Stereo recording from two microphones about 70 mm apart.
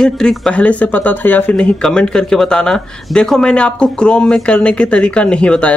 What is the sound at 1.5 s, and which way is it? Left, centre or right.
Speech, centre.